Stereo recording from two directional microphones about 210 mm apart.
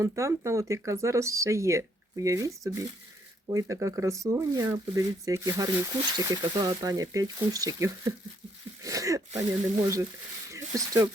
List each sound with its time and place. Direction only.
0.0 s speech: 15° right (ahead or behind)